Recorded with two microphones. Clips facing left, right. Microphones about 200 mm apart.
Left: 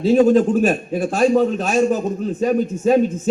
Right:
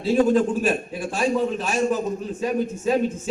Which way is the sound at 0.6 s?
50° left (ahead or behind).